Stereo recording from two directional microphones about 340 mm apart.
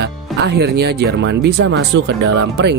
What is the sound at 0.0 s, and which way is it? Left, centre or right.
Speech, right.